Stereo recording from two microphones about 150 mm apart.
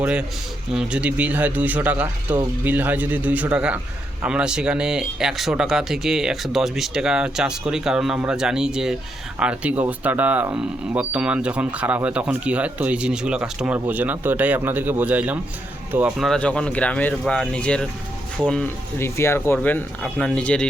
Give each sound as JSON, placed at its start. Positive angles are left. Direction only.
{"t": 0.0, "sound": "speech", "side_deg": -10}
{"t": 16.1, "sound": "speech", "side_deg": 0}
{"t": 18.9, "sound": "speech", "side_deg": 15}